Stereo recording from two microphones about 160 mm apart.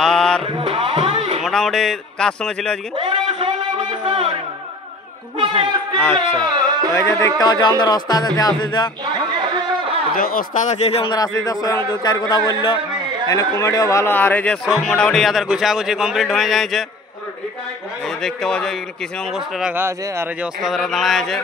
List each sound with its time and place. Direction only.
0.0 s music: 5° left (ahead or behind)
0.5 s music: 35° right (ahead or behind)
1.4 s speech: 5° left (ahead or behind)
3.0 s a sound: 35° right (ahead or behind)
5.4 s speech: 30° right (ahead or behind)
6.4 s carnatic music: 25° right (ahead or behind)
7.0 s speech: 15° left (ahead or behind)
9.3 s a sound: 30° right (ahead or behind)
10.1 s speech: 65° left (ahead or behind); by 11.1 s 40° left (ahead or behind)
11.1 s speech: 25° left (ahead or behind); by 16.8 s centre (ahead or behind)
18.0 s speech: 5° left (ahead or behind)
19.3 s speech: 10° right (ahead or behind)
20.6 s speech: centre (ahead or behind)